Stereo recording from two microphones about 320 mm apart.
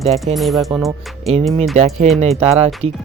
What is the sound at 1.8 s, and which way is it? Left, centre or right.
Speech, centre.